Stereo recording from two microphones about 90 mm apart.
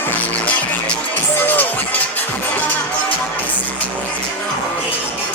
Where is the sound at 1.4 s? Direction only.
20° left (ahead or behind).